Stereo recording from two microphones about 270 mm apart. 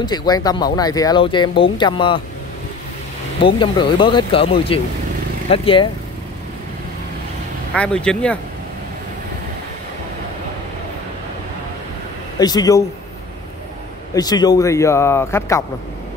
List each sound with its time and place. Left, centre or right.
0.0 s a man's voice: centre
3.3 s speech: centre
7.7 s speech: centre
12.4 s a man's voice: centre
14.1 s a man's voice: centre